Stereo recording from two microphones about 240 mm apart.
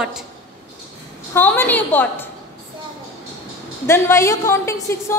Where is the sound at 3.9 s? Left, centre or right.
Centre.